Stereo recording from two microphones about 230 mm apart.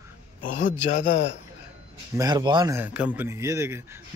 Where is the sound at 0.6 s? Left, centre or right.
Left.